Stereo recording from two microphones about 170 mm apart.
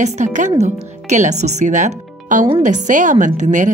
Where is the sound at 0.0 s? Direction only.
45° right (ahead or behind).